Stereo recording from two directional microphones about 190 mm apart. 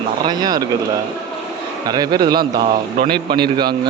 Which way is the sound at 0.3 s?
20° right (ahead or behind).